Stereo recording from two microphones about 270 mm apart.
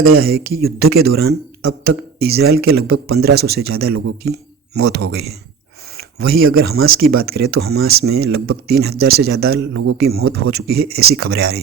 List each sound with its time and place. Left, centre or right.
0.0 s speech: right
4.9 s speech: right
6.0 s speech: right
10.1 s speech: right